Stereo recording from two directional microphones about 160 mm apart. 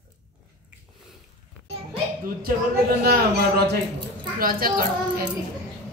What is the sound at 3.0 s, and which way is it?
Speech, 85° right.